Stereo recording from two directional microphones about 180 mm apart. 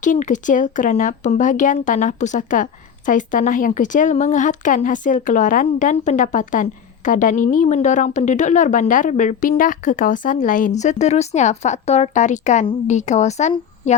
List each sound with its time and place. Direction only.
0.0 s speech: 45° left (ahead or behind)